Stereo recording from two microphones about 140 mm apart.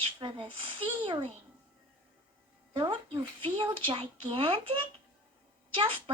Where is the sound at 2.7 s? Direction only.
35° right (ahead or behind).